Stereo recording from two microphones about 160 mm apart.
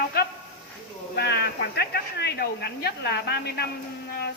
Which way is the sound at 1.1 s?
90° left.